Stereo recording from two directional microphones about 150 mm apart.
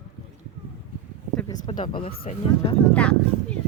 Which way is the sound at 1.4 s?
30° left (ahead or behind).